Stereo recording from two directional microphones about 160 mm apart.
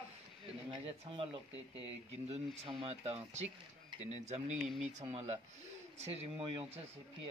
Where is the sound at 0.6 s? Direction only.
35° right (ahead or behind).